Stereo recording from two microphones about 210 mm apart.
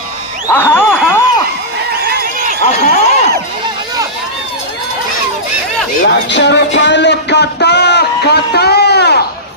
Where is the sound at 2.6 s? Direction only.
35° left (ahead or behind).